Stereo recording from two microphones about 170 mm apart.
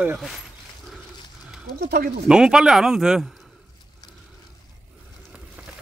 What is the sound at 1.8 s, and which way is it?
Speech, 65° right (ahead or behind).